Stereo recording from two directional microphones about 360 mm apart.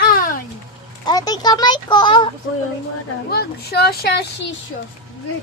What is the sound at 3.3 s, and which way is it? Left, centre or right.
Speech, left.